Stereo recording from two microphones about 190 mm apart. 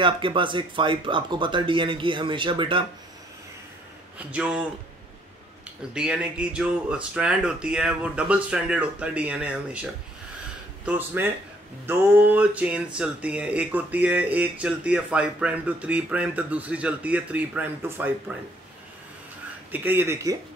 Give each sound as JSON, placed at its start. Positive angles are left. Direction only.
{"t": 0.0, "sound": "speech", "side_deg": -25}
{"t": 4.3, "sound": "speech", "side_deg": -5}
{"t": 5.9, "sound": "speech", "side_deg": -5}
{"t": 10.9, "sound": "speech", "side_deg": -10}
{"t": 19.7, "sound": "speech", "side_deg": -10}